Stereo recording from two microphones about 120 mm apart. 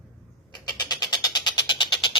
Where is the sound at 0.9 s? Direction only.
35° left (ahead or behind).